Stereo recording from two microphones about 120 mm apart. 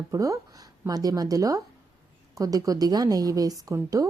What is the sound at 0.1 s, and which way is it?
Speech, 25° right (ahead or behind).